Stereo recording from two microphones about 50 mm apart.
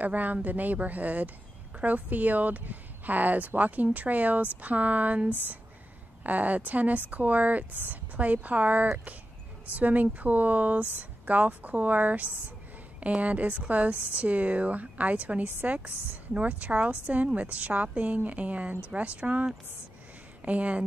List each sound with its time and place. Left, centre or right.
0.0 s speech: right